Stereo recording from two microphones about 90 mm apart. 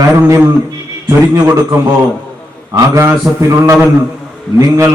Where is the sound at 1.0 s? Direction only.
40° right (ahead or behind).